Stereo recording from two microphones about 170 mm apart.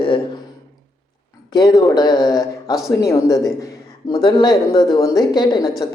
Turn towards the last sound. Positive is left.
turn(degrees=25)  # may be behind; listen again after turning